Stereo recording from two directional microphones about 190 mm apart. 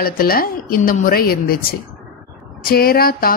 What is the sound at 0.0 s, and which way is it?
A woman's voice, 50° left (ahead or behind).